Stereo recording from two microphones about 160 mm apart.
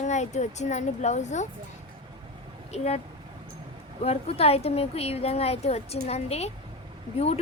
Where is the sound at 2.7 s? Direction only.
40° left (ahead or behind).